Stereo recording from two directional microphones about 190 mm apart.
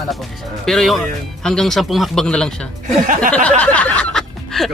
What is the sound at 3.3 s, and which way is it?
Snicker, 5° left (ahead or behind).